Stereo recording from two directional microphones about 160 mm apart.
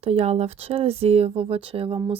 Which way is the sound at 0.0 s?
40° right (ahead or behind).